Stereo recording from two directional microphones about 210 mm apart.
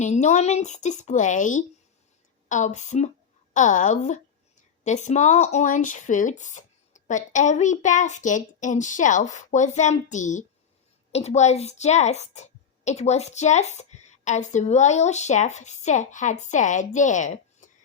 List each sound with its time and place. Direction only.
0.0 s speech: 35° left (ahead or behind)